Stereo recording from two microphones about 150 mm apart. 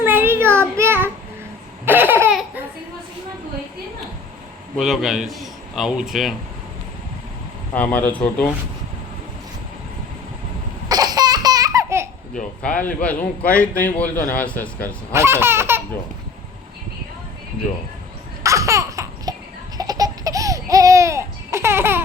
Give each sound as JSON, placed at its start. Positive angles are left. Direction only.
{"t": 0.0, "sound": "child singing", "side_deg": -15}
{"t": 1.8, "sound": "laughter", "side_deg": -15}
{"t": 4.8, "sound": "a man's voice", "side_deg": 0}
{"t": 7.7, "sound": "a man's voice", "side_deg": 10}
{"t": 10.8, "sound": "laughter", "side_deg": -25}
{"t": 12.6, "sound": "a man's voice", "side_deg": 10}
{"t": 15.1, "sound": "speech", "side_deg": -15}
{"t": 18.4, "sound": "laughter", "side_deg": -20}